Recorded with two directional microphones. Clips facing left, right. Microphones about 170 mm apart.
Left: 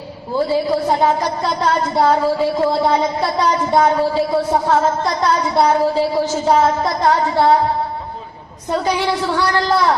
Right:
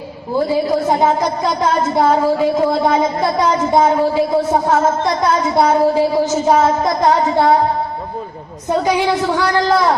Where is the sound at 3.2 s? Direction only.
20° right (ahead or behind).